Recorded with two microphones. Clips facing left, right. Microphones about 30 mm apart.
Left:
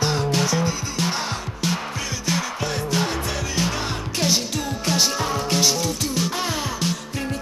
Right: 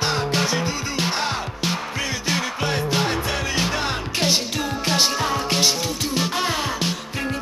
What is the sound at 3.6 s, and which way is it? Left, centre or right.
Music, right.